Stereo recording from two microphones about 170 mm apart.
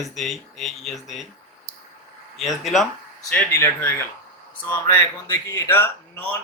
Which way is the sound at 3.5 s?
15° left (ahead or behind).